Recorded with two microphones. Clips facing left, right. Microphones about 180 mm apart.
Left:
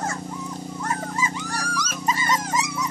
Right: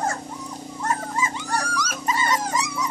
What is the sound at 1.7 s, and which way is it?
Dog, 25° left (ahead or behind).